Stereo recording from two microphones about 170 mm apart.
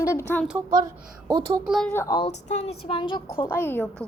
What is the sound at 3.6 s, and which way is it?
Speech, 10° left (ahead or behind).